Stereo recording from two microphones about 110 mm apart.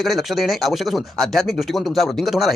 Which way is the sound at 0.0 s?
Centre (ahead or behind).